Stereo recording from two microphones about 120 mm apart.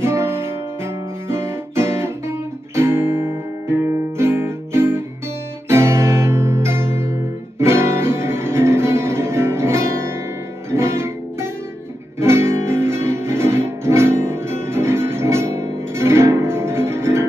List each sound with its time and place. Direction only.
0.0 s guitar: 20° right (ahead or behind)
5.7 s music: 20° right (ahead or behind)